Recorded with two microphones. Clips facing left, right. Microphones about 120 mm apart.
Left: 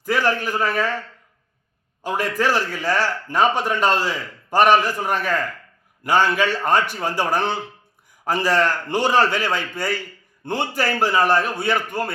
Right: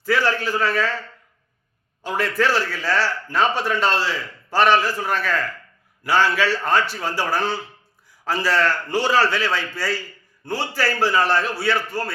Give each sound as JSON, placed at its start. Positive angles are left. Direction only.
{"t": 0.0, "sound": "a man's voice", "side_deg": 15}
{"t": 2.0, "sound": "a man's voice", "side_deg": 15}